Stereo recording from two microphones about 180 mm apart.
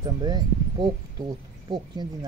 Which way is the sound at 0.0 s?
25° right (ahead or behind).